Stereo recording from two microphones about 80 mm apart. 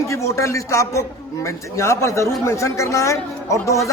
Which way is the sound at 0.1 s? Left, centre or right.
Left.